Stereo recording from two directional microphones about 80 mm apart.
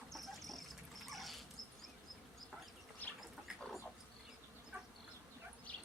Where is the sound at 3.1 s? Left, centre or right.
Centre.